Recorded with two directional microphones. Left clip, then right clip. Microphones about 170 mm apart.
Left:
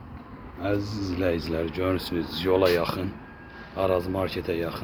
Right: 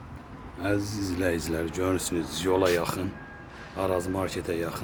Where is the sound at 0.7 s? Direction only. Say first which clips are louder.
Right 1 dB; 50° right (ahead or behind).